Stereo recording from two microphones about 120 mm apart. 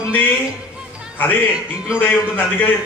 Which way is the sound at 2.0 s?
15° left (ahead or behind).